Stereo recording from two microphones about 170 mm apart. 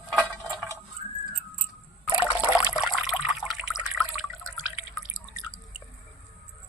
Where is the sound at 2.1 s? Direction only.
25° left (ahead or behind).